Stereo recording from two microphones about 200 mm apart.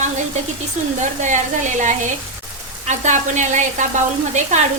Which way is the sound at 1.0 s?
40° right (ahead or behind).